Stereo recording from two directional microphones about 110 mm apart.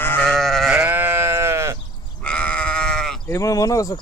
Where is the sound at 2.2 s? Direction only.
10° left (ahead or behind).